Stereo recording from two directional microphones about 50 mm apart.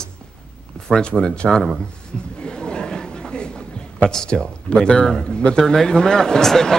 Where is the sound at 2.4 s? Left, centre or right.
Centre.